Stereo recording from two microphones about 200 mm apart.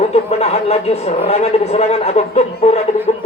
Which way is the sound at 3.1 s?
35° left (ahead or behind).